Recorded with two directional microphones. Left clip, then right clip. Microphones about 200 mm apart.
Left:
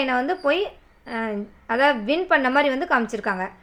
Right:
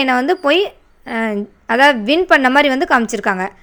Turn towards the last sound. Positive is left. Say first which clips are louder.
# right 7 dB
turn(degrees=-45)  # may be behind; listen again after turning